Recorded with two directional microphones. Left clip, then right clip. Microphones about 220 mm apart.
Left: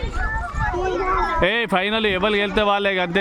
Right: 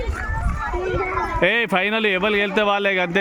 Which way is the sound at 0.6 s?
45° right (ahead or behind).